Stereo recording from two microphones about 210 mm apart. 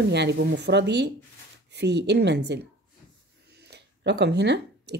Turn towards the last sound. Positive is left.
turn(degrees=-55)  # may be behind; listen again after turning